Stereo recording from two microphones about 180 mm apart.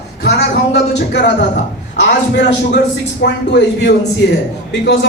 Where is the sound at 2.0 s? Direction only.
75° left (ahead or behind).